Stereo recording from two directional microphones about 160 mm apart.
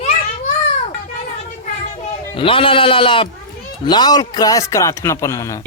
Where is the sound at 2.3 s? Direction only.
35° left (ahead or behind).